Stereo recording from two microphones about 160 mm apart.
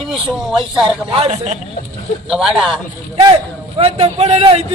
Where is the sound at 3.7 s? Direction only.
40° right (ahead or behind).